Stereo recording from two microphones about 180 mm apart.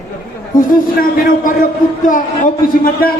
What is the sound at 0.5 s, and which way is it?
A man's voice, 50° left (ahead or behind).